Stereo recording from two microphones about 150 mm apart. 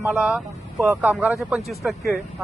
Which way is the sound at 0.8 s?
15° right (ahead or behind).